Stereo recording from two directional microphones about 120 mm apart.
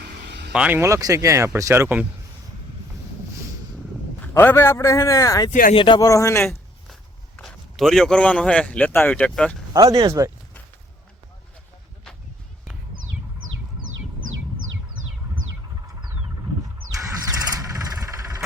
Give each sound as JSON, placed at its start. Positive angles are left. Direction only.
{"t": 0.5, "sound": "speech", "side_deg": -10}
{"t": 0.8, "sound": "speech", "side_deg": -25}
{"t": 4.4, "sound": "a man's voice", "side_deg": 20}
{"t": 5.7, "sound": "speech", "side_deg": 45}
{"t": 6.0, "sound": "a man's voice", "side_deg": 25}
{"t": 7.3, "sound": "a man's voice", "side_deg": 5}
{"t": 9.7, "sound": "speech", "side_deg": -35}
{"t": 17.2, "sound": "vehicle", "side_deg": -30}